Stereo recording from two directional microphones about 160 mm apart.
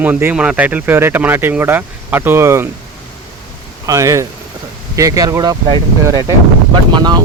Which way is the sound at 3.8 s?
20° right (ahead or behind).